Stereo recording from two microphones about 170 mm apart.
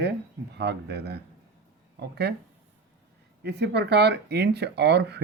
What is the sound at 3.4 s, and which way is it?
Speech, 80° right.